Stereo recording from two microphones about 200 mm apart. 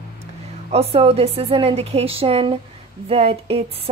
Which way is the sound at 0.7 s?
30° right (ahead or behind).